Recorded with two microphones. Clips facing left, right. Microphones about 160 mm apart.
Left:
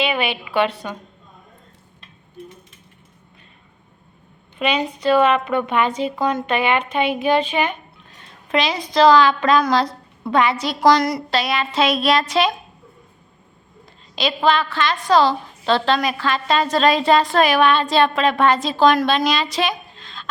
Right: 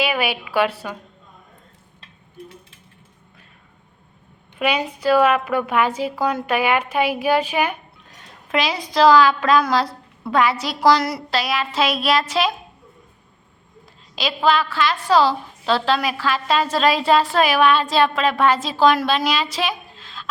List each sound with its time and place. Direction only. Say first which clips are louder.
0.0 s a woman's voice: even; 5° right (ahead or behind)
4.6 s a woman's voice: left 1 dB; 10° right (ahead or behind)
14.2 s a woman's voice: left 1 dB; 5° right (ahead or behind)